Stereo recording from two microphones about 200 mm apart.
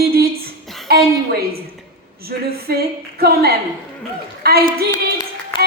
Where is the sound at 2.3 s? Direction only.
50° right (ahead or behind).